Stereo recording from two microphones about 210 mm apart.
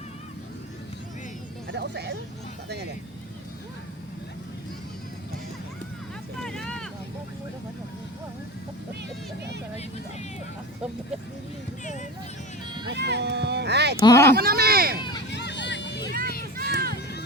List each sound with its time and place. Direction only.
1.7 s speech: 55° right (ahead or behind)
6.3 s vehicle: centre (ahead or behind)
12.9 s a sound: 55° right (ahead or behind)
14.0 s speech: 15° left (ahead or behind)
14.3 s a sound: 45° right (ahead or behind)
15.3 s hubbub: 55° left (ahead or behind)
16.6 s run: 45° right (ahead or behind)